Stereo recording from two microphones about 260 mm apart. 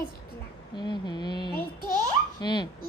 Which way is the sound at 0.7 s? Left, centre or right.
Centre.